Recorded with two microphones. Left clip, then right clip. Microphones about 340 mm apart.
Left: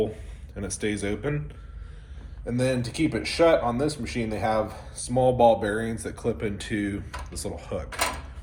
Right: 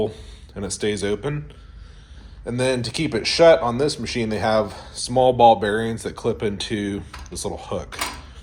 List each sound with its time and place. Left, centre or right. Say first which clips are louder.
0.5 s speech: right 5 dB; centre
2.5 s speech: right 4 dB; centre